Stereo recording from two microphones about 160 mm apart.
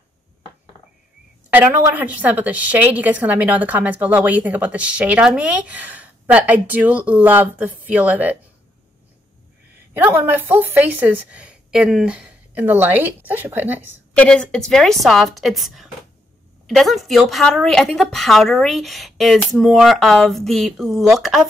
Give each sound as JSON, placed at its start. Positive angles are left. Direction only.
{"t": 1.5, "sound": "a woman's voice", "side_deg": -10}
{"t": 9.9, "sound": "a woman's voice", "side_deg": -10}
{"t": 14.1, "sound": "a woman's voice", "side_deg": 5}